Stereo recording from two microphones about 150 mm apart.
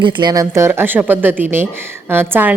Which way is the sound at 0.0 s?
30° right (ahead or behind).